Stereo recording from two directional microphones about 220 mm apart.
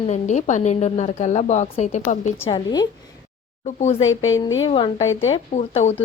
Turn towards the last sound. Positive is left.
turn(degrees=30)  # may be behind; listen again after turning